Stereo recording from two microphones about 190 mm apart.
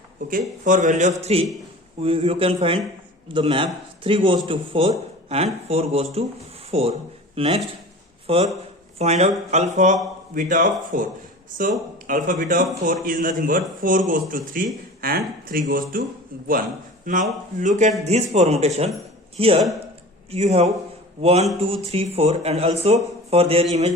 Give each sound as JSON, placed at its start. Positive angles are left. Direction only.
{"t": 0.3, "sound": "a man's voice", "side_deg": -45}
{"t": 12.0, "sound": "a man's voice", "side_deg": -45}
{"t": 17.1, "sound": "a man's voice", "side_deg": -45}